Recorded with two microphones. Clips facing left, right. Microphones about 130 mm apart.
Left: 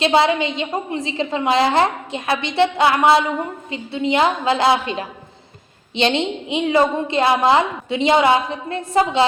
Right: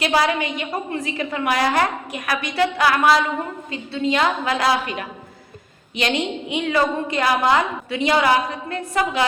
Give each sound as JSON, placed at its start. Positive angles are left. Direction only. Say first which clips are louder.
{"t": 0.0, "sound": "a woman's voice", "louder": "left 4 dB", "side_deg": 25}